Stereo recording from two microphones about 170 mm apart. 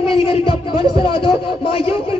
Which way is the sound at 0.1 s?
30° left (ahead or behind).